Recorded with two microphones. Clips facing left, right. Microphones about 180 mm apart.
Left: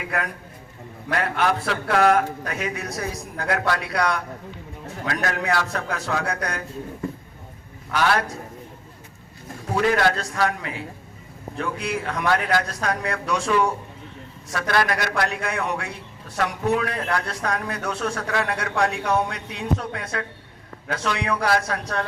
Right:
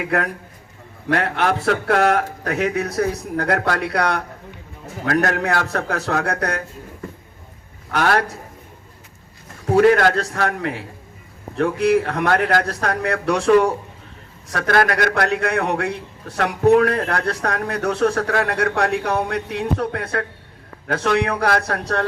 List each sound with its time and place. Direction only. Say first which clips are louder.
0.0 s speech: right 6 dB; 60° right (ahead or behind)
7.9 s a man's voice: right 3 dB; 50° right (ahead or behind)
9.7 s speech: right 7 dB; 50° right (ahead or behind)